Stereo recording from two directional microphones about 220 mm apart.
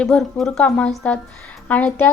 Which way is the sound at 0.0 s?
Centre (ahead or behind).